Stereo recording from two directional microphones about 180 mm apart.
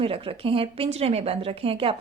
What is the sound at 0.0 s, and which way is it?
A woman's voice, 30° right (ahead or behind).